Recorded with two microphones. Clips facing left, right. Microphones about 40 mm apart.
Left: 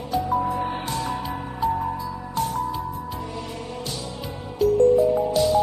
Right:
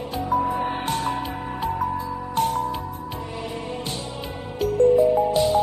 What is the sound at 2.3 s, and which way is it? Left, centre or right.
Music, right.